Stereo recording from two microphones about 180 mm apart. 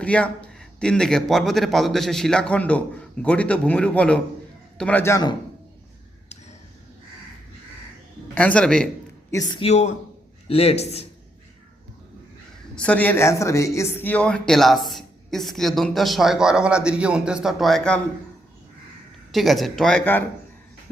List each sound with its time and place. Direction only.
0.0 s a man's voice: 5° left (ahead or behind)
8.4 s speech: 5° left (ahead or behind)
9.3 s a man's voice: 25° left (ahead or behind)
12.7 s speech: 5° left (ahead or behind)
19.3 s speech: centre (ahead or behind)